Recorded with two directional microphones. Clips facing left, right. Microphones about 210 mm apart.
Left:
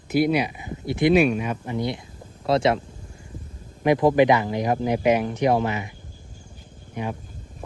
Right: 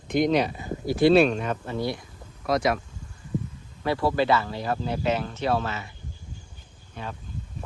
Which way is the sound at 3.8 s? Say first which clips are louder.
Left 7 dB; 15° left (ahead or behind).